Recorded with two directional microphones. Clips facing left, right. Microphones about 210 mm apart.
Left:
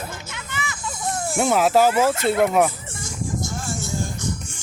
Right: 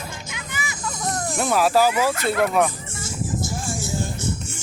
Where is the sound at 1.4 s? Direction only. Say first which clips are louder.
Left 2 dB; 20° left (ahead or behind).